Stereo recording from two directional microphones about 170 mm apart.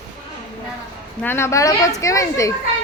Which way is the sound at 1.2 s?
15° left (ahead or behind).